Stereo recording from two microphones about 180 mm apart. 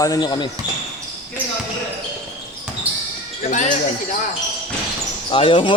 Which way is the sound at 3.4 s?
45° left (ahead or behind).